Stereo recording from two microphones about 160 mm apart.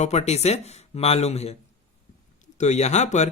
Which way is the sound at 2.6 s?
45° left (ahead or behind).